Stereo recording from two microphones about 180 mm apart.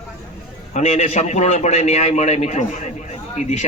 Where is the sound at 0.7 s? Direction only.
40° left (ahead or behind).